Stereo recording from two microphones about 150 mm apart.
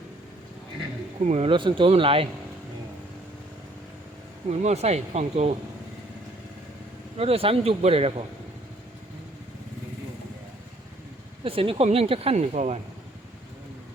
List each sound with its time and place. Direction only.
1.2 s speech: 45° right (ahead or behind)
4.4 s speech: 45° right (ahead or behind)
7.2 s speech: 40° right (ahead or behind)
11.4 s speech: 40° right (ahead or behind)